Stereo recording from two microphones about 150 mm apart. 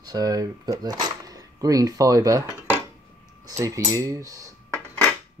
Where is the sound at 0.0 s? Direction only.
25° right (ahead or behind).